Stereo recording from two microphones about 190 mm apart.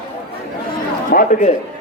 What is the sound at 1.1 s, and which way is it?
Speech, 45° left (ahead or behind).